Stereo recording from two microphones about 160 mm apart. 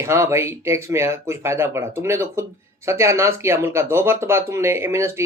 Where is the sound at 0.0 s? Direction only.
15° right (ahead or behind).